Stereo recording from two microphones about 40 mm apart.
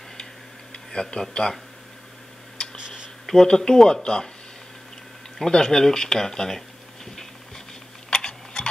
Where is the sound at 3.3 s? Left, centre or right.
Centre.